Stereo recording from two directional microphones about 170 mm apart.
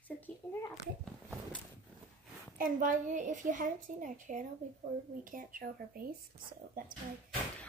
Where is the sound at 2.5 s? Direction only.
50° right (ahead or behind).